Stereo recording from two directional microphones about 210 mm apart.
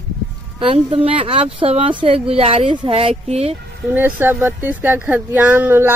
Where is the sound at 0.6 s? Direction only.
25° right (ahead or behind).